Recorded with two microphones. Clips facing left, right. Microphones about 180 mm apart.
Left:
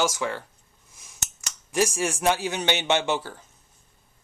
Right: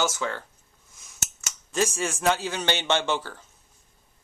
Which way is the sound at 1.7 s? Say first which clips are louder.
Left 2 dB; 15° left (ahead or behind).